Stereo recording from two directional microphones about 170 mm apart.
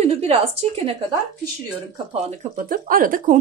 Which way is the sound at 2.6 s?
55° right (ahead or behind).